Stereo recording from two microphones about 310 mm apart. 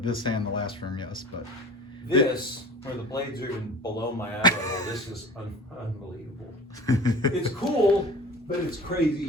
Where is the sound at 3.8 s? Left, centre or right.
Centre.